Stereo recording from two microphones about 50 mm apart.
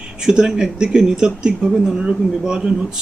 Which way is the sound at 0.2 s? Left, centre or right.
Centre.